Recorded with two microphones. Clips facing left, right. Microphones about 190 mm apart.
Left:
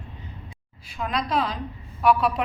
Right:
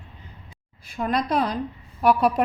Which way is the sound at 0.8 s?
50° right (ahead or behind).